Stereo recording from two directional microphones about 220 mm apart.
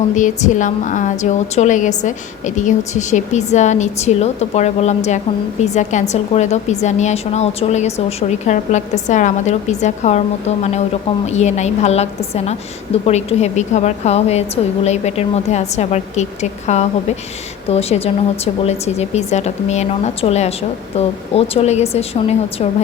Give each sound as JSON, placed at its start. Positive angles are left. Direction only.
{"t": 0.2, "sound": "a woman's voice", "side_deg": 35}